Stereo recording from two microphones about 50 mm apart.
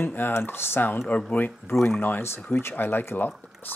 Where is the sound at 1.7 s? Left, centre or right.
Left.